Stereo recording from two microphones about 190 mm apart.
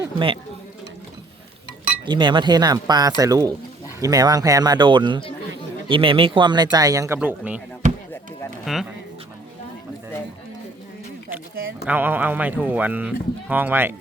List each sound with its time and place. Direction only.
0.0 s speech: 25° right (ahead or behind)
2.0 s speech: 25° right (ahead or behind); by 7.6 s 10° right (ahead or behind)
8.6 s speech: centre (ahead or behind)
11.9 s speech: 10° right (ahead or behind)